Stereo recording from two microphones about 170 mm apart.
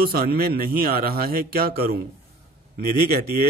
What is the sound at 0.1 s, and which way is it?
A man's voice, 60° right (ahead or behind).